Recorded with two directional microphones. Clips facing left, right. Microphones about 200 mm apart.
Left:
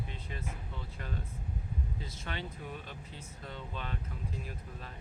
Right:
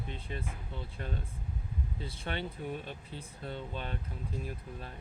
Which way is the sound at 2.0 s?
30° right (ahead or behind).